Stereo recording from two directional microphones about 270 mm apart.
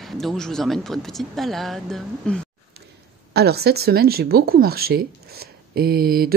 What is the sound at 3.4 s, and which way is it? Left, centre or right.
Speech, right.